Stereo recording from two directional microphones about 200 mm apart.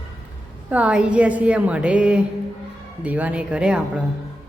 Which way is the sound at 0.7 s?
5° right (ahead or behind).